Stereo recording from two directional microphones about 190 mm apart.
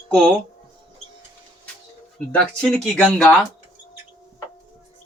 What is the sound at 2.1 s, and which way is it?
Speech, 5° left (ahead or behind).